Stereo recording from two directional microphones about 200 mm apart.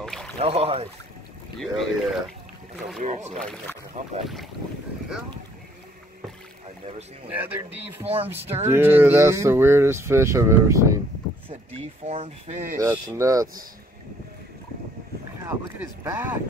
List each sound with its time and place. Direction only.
0.0 s boat: 5° left (ahead or behind)
0.4 s speech: 30° right (ahead or behind)
1.6 s speech: centre (ahead or behind)
3.0 s speech: 35° right (ahead or behind)
7.2 s speech: 10° right (ahead or behind)
11.4 s speech: 30° right (ahead or behind)
12.7 s speech: 15° right (ahead or behind)
15.4 s speech: 15° right (ahead or behind)